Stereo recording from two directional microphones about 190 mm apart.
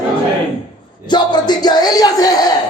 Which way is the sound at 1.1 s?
20° left (ahead or behind).